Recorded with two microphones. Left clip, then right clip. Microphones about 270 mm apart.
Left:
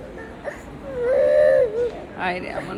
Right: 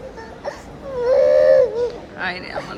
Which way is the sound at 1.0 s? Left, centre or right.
Right.